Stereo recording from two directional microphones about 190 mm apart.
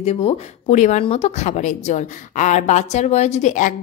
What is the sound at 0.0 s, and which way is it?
Speech, 30° left (ahead or behind).